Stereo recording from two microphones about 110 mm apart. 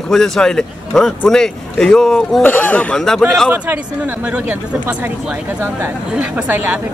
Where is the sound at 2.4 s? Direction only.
15° left (ahead or behind).